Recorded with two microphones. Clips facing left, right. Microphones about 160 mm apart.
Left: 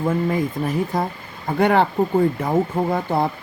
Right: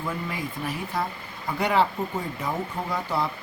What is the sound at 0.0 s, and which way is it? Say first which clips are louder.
Speech: left 11 dB; 45° left (ahead or behind).